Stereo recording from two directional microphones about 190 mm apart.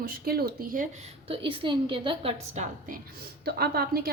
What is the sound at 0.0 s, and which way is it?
Speech, 50° right (ahead or behind).